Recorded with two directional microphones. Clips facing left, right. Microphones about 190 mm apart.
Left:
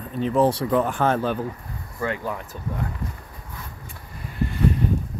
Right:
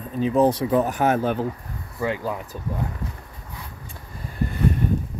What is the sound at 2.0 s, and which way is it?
Speech, 15° right (ahead or behind).